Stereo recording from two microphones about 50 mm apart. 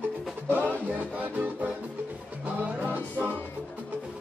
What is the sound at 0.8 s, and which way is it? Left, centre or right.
Music, right.